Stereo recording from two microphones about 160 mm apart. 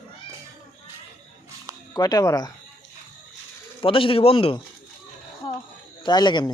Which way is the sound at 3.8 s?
35° left (ahead or behind).